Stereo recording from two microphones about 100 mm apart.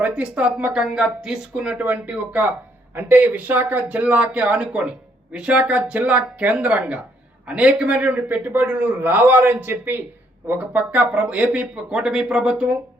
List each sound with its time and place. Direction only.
0.0 s speech: 10° right (ahead or behind)